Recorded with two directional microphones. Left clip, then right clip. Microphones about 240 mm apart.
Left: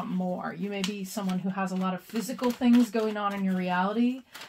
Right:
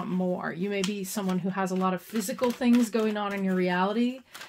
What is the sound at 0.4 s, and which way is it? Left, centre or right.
Speech, right.